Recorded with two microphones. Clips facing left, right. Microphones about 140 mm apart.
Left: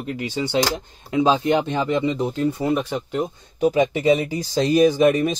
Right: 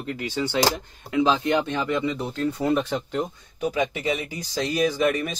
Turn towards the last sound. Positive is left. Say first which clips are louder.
# left 6 dB
turn(degrees=25)  # may be behind; listen again after turning